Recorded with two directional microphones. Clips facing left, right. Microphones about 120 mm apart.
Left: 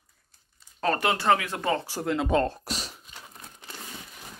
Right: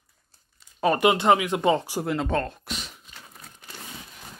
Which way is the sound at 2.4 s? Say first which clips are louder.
Left 4 dB; 35° left (ahead or behind).